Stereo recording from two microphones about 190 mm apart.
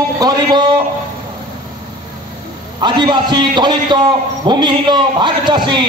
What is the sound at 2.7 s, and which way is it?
A man's voice, 25° right (ahead or behind).